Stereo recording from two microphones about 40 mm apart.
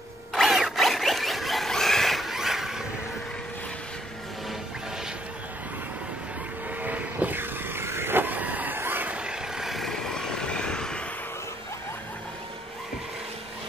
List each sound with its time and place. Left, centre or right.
0.4 s zipper: centre
1.7 s a sound: centre
2.3 s vehicle: centre
6.8 s vehicle: right
7.3 s a sound: right
8.2 s vehicle: right
8.7 s a sound: right
9.2 s vehicle: centre
9.7 s vehicle: centre
9.9 s vehicle: centre